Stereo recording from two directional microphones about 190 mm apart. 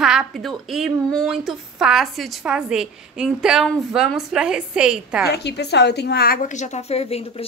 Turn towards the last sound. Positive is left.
turn(degrees=30)  # may be behind; listen again after turning